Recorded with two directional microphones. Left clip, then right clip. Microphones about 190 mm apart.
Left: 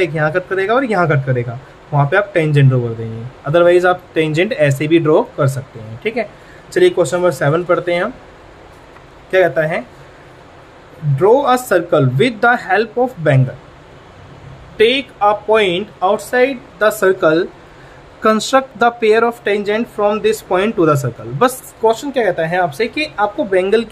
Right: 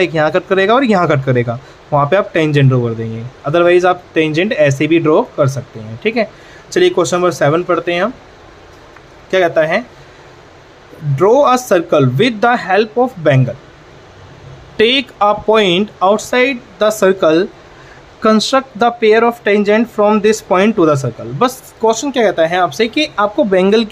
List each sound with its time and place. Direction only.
0.0 s a man's voice: 30° right (ahead or behind)
6.7 s speech: 30° right (ahead or behind)
9.3 s speech: 30° right (ahead or behind)
11.1 s speech: 30° right (ahead or behind)
14.8 s a man's voice: 40° right (ahead or behind); by 21.5 s 15° right (ahead or behind)
21.8 s a man's voice: 35° right (ahead or behind)